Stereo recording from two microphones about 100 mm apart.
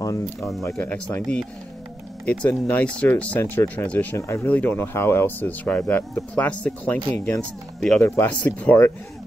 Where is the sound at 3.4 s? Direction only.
25° left (ahead or behind); by 8.0 s 5° left (ahead or behind).